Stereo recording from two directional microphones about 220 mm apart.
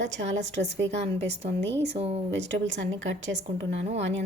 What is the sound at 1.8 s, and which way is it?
Speech, 30° right (ahead or behind).